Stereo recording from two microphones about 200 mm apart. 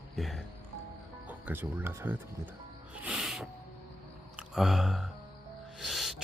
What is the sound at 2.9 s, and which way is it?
Music, 5° right (ahead or behind).